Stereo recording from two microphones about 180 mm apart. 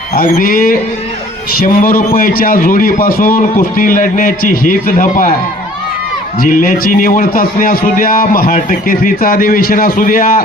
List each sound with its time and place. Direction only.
0.1 s a man's voice: 50° left (ahead or behind)
6.4 s a man's voice: 50° left (ahead or behind)